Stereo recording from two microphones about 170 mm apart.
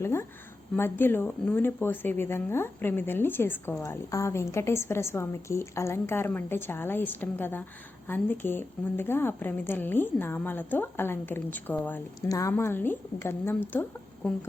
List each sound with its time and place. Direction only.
0.0 s speech: 15° left (ahead or behind)